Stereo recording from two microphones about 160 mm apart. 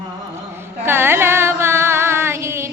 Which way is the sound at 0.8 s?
15° right (ahead or behind).